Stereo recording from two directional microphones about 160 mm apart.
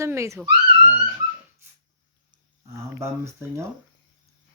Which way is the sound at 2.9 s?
15° right (ahead or behind).